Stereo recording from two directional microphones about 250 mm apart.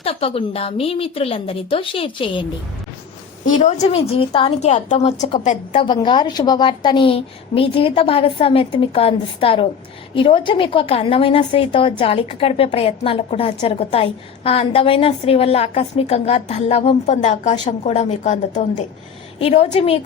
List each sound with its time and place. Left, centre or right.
0.0 s a woman's voice: left